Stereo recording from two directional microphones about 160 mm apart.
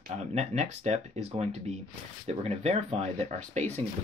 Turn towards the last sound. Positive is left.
turn(degrees=-40)  # may be behind; listen again after turning